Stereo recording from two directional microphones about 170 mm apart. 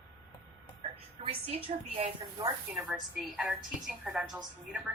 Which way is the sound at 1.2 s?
35° right (ahead or behind).